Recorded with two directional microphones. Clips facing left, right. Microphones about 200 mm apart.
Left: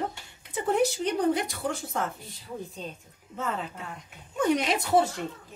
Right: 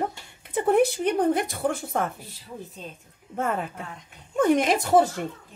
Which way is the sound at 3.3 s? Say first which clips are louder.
Right 5 dB; 50° right (ahead or behind).